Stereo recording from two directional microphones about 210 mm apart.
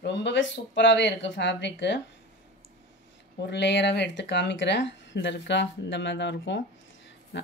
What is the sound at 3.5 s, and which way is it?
Speech, 55° left (ahead or behind).